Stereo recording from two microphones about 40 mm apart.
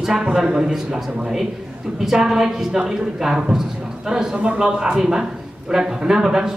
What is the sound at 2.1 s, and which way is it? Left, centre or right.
A man's voice, centre.